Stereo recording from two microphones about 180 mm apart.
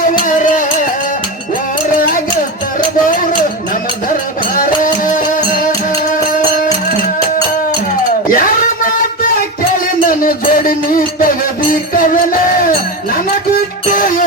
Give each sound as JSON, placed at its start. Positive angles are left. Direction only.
{"t": 0.0, "sound": "music", "side_deg": 45}
{"t": 4.5, "sound": "music", "side_deg": 50}
{"t": 8.3, "sound": "music", "side_deg": 50}